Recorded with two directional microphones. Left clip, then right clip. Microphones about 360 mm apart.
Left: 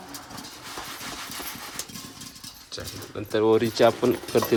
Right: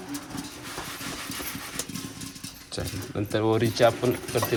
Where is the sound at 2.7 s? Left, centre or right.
Centre.